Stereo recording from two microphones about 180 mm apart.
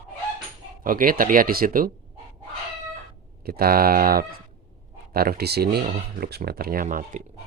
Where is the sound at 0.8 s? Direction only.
50° right (ahead or behind).